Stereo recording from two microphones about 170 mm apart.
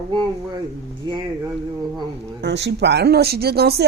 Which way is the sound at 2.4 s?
80° right.